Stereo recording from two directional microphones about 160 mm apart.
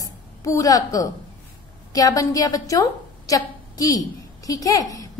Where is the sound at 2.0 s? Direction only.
20° left (ahead or behind).